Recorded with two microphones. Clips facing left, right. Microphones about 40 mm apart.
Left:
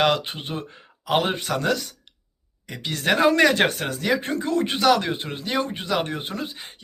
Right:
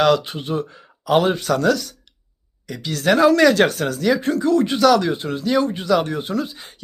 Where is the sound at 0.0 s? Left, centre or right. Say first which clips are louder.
Right 4 dB; left.